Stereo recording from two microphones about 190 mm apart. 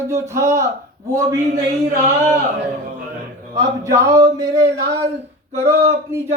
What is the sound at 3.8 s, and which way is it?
Speech, 15° right (ahead or behind).